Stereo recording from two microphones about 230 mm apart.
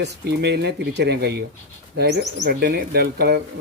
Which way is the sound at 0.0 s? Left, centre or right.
Right.